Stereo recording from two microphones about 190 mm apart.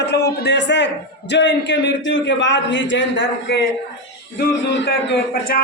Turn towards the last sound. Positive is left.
turn(degrees=60)  # may be behind; listen again after turning